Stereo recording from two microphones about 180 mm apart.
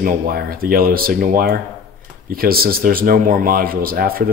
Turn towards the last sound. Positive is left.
turn(degrees=-55)  # may be behind; listen again after turning